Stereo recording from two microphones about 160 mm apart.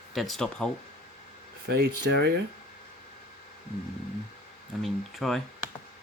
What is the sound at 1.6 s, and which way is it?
Speech, 85° right.